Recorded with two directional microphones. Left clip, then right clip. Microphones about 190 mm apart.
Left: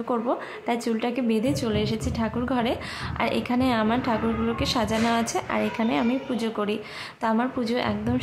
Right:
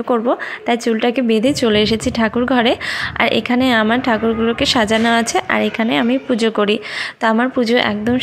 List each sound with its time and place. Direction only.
0.1 s a woman's voice: 20° right (ahead or behind)